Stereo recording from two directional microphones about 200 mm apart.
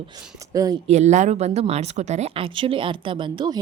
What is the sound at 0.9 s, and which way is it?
A woman's voice, 35° right (ahead or behind).